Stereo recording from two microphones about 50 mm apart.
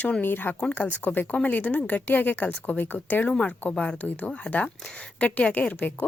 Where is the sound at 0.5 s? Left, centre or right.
Left.